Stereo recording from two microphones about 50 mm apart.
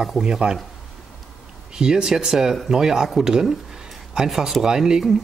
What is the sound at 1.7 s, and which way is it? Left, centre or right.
Speech, centre.